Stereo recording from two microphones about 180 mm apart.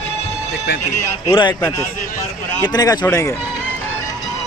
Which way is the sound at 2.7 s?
20° left (ahead or behind).